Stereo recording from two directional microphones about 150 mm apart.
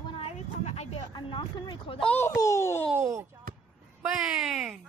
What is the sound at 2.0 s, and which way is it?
Speech, 10° left (ahead or behind).